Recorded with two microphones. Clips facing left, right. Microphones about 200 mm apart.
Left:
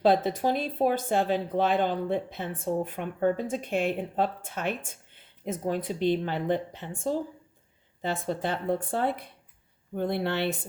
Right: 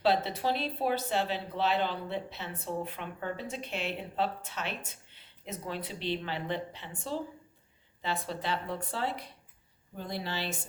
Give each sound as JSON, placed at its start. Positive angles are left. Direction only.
{"t": 0.0, "sound": "a woman's voice", "side_deg": 50}